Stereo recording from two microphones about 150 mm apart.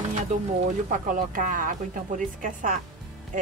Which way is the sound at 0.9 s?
65° right (ahead or behind).